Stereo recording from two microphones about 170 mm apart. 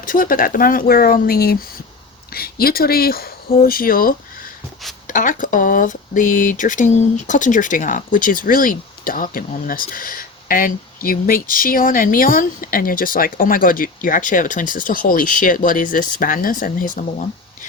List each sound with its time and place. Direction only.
0.0 s speech: 55° left (ahead or behind)